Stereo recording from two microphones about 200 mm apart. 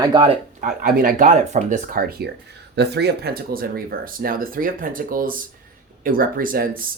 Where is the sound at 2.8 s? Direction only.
55° right (ahead or behind).